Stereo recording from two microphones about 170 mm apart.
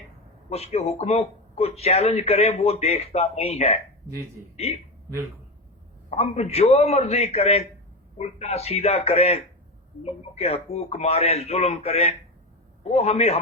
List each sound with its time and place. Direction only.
0.5 s speech: 35° left (ahead or behind)
6.1 s speech: 40° left (ahead or behind)